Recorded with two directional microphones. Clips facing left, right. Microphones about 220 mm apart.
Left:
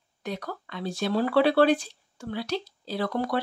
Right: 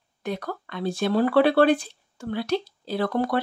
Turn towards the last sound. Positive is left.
turn(degrees=-55)  # may be behind; listen again after turning